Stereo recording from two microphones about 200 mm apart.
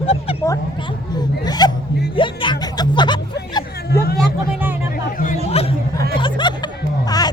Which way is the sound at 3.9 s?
50° left (ahead or behind).